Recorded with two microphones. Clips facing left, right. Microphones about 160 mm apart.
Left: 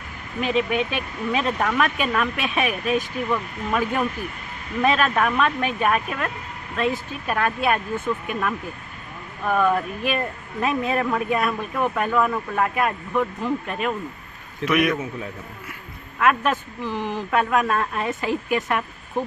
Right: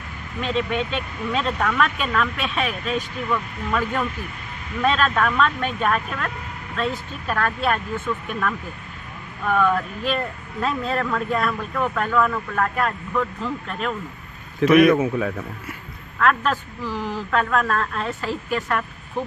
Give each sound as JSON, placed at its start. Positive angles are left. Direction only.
{"t": 0.4, "sound": "speech", "side_deg": 10}
{"t": 15.0, "sound": "speech", "side_deg": -90}
{"t": 16.2, "sound": "speech", "side_deg": 15}